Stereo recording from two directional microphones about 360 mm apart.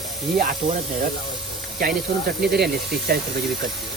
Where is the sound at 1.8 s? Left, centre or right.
Right.